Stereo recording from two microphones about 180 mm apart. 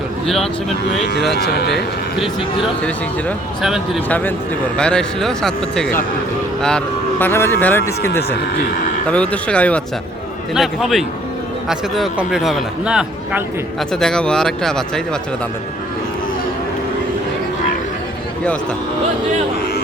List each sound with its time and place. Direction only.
1.3 s speech: 65° left (ahead or behind)
2.8 s a man's voice: 5° left (ahead or behind)